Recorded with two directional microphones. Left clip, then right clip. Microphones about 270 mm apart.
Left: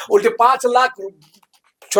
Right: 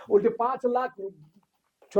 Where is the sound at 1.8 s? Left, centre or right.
Centre.